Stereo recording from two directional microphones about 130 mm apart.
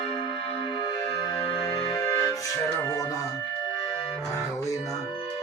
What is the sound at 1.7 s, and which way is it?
Music, 25° left (ahead or behind).